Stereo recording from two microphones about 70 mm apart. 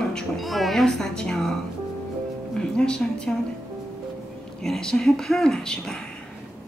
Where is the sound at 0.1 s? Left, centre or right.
Centre.